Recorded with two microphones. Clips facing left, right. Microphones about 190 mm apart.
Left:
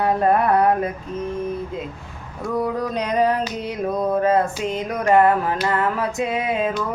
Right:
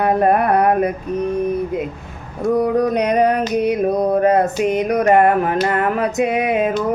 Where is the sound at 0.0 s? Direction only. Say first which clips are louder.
Right 3 dB; 60° right (ahead or behind).